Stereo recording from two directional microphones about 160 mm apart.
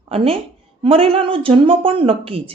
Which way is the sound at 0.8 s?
35° right (ahead or behind).